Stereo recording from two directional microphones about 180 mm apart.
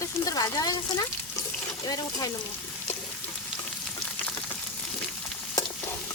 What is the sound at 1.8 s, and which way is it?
Speech, 20° left (ahead or behind).